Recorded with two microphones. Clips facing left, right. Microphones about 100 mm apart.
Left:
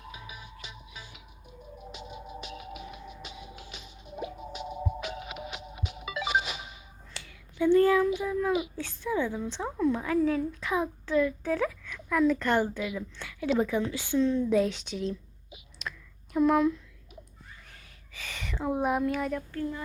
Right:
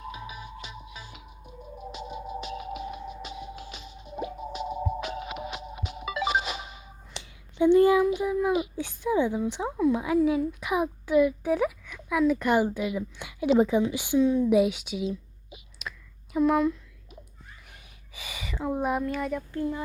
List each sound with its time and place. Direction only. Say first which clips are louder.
0.6 s music: right 4 dB; 40° right (ahead or behind)
7.1 s a sound: right 2 dB; 20° right (ahead or behind)
8.2 s child singing: right 3 dB; 15° right (ahead or behind)
8.7 s a woman's voice: right 4 dB; 15° right (ahead or behind)
15.8 s clicking: left 1 dB; centre (ahead or behind)
18.1 s speech: right 1 dB; 10° right (ahead or behind)
19.5 s speech: right 3 dB; 20° right (ahead or behind)